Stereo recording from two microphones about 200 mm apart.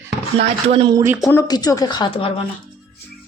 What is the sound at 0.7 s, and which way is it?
Speech, 25° right (ahead or behind).